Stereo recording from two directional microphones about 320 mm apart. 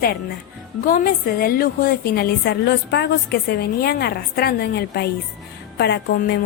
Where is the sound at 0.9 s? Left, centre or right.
Left.